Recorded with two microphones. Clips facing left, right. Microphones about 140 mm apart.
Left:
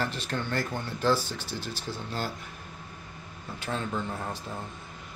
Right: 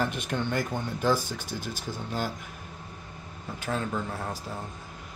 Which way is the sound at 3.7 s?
5° right (ahead or behind).